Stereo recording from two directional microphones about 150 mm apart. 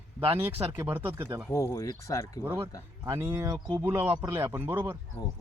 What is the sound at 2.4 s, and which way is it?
Speech, 15° right (ahead or behind).